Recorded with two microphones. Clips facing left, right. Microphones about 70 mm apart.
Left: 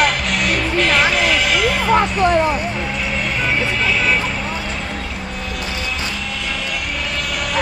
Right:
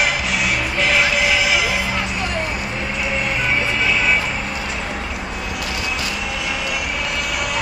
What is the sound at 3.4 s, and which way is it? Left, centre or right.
Music, centre.